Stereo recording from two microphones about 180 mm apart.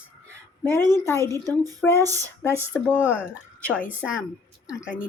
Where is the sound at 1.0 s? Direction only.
15° left (ahead or behind).